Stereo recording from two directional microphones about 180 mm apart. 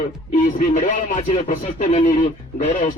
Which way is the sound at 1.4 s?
45° left (ahead or behind).